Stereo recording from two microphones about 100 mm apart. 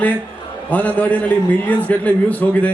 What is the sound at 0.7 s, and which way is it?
A man's voice, 15° left (ahead or behind).